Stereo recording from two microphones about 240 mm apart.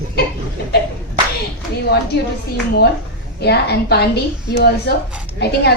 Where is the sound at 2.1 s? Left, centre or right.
Left.